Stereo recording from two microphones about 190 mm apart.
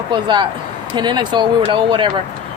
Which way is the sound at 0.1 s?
25° right (ahead or behind).